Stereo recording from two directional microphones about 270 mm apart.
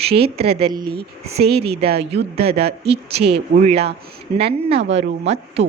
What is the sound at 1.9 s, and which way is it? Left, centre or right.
A woman's voice, right.